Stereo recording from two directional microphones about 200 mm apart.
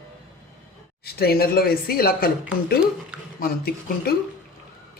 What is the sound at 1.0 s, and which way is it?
Speech, 50° left (ahead or behind).